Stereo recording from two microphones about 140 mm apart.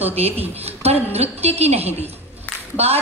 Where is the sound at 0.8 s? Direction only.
50° right (ahead or behind).